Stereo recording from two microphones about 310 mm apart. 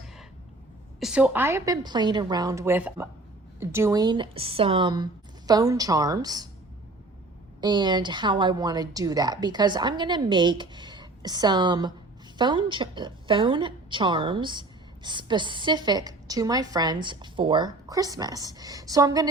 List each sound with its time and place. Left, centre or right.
0.9 s a woman's voice: centre
7.6 s a woman's voice: centre